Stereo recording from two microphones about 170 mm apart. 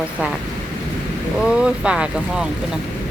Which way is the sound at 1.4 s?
5° right (ahead or behind).